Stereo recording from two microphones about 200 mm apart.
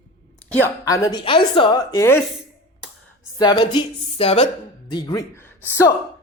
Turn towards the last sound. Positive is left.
turn(degrees=10)  # may be behind; listen again after turning